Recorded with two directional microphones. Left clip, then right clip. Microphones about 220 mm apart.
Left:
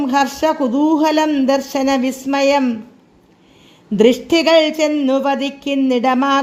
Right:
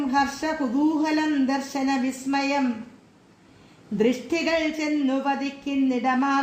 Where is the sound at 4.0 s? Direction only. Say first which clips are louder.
Left 11 dB; 40° left (ahead or behind).